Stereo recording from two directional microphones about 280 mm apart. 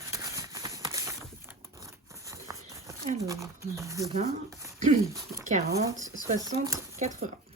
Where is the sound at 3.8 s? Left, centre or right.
Centre.